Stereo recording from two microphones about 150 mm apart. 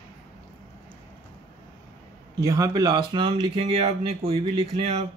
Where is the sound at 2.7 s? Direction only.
30° right (ahead or behind).